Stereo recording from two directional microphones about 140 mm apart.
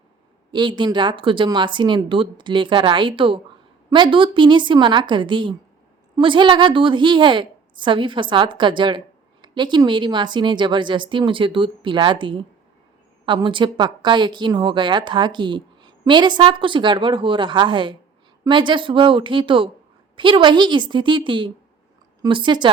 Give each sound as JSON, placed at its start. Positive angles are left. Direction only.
{"t": 0.5, "sound": "a woman's voice", "side_deg": -35}